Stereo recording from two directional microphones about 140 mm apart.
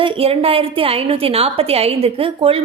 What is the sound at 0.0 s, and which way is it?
A woman's voice, 40° right (ahead or behind).